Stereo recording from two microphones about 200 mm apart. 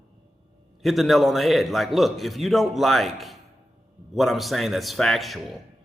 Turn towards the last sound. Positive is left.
turn(degrees=0)  # may be behind; listen again after turning